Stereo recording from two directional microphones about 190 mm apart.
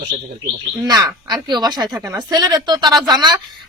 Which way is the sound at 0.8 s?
20° right (ahead or behind).